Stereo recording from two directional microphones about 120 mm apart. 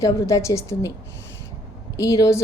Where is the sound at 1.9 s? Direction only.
25° left (ahead or behind).